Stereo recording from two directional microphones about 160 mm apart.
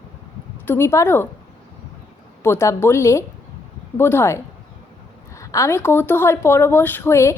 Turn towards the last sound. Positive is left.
turn(degrees=15)  # may be behind; listen again after turning